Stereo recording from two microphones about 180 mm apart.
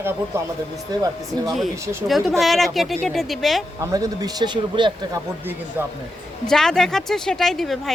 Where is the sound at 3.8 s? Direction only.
20° right (ahead or behind).